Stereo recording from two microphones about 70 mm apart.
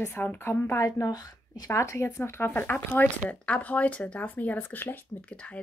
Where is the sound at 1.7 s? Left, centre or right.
Left.